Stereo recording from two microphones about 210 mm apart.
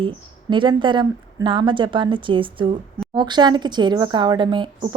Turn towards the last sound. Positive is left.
turn(degrees=-20)  # may be behind; listen again after turning